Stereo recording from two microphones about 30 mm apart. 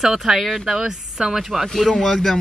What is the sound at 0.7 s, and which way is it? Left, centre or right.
Speech, right.